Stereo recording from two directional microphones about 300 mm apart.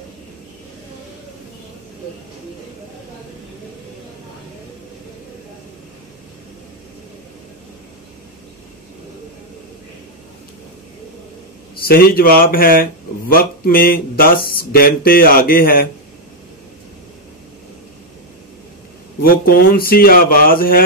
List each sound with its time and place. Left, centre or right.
11.8 s speech: left
19.2 s speech: left